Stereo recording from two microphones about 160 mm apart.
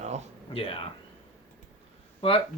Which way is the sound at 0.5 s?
35° left (ahead or behind).